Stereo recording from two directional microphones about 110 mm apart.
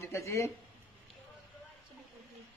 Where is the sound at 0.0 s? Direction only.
25° left (ahead or behind).